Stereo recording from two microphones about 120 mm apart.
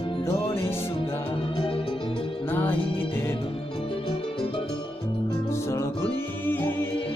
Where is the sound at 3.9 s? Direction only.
45° left (ahead or behind).